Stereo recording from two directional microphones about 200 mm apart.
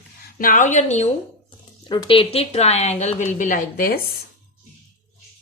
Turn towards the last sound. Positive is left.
turn(degrees=45)  # may be behind; listen again after turning